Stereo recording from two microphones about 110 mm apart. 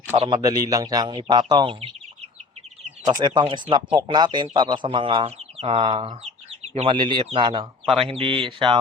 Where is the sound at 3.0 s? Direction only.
40° right (ahead or behind).